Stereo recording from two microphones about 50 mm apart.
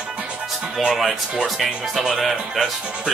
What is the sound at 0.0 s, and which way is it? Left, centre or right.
Music, right.